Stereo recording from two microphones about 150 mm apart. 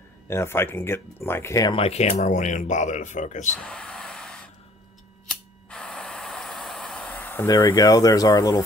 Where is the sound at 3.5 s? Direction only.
5° left (ahead or behind).